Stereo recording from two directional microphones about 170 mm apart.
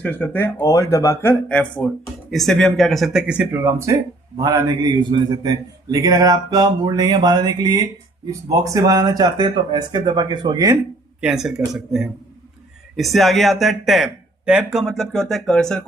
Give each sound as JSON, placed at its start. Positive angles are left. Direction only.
{"t": 0.0, "sound": "a man's voice", "side_deg": 10}
{"t": 11.2, "sound": "speech", "side_deg": -5}